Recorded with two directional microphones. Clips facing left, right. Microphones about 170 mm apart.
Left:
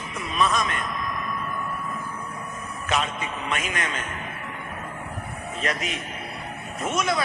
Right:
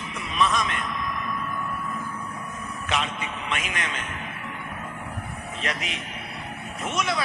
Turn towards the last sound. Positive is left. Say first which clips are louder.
# left 2 dB
turn(degrees=45)  # may be behind; listen again after turning